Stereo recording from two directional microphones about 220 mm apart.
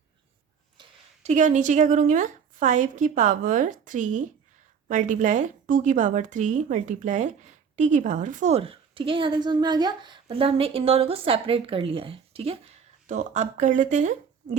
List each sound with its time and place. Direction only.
0.8 s a woman's voice: 30° right (ahead or behind)